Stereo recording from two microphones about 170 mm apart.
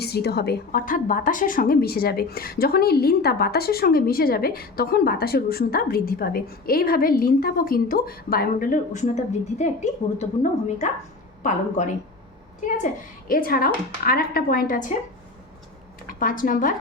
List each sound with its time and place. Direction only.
0.0 s a woman's voice: 70° left (ahead or behind); by 14.9 s 50° left (ahead or behind)
16.0 s a woman's voice: 55° left (ahead or behind)